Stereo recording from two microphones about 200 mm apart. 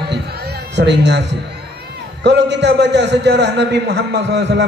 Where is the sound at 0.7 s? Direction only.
60° right (ahead or behind).